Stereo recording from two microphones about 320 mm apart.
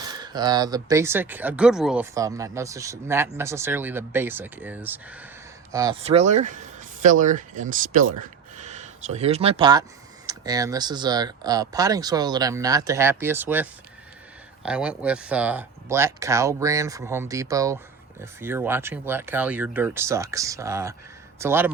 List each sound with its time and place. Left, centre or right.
0.2 s speech: centre
8.2 s a sound: right
10.2 s a man's voice: centre